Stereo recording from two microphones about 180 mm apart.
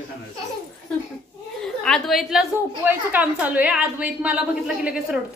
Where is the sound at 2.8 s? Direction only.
10° right (ahead or behind).